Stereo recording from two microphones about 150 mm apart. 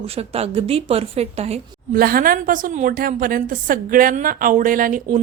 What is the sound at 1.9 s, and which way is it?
A woman's voice, 75° right (ahead or behind).